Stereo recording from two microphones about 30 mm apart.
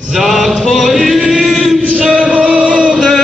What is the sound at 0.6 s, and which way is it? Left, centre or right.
Singing, centre.